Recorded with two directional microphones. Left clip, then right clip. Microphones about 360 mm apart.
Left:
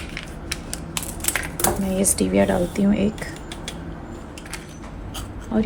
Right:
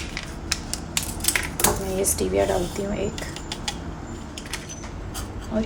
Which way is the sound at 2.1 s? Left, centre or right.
Left.